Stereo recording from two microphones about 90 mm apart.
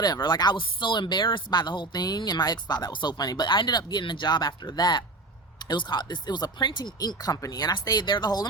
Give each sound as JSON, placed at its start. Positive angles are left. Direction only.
{"t": 0.0, "sound": "speech", "side_deg": 50}